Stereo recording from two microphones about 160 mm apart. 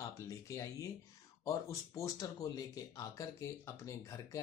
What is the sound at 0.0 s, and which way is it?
Speech, 20° left (ahead or behind).